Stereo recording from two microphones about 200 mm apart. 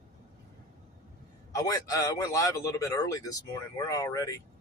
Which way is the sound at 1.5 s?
15° left (ahead or behind).